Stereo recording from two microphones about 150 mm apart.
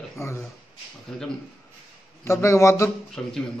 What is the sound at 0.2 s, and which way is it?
Speech, 15° left (ahead or behind).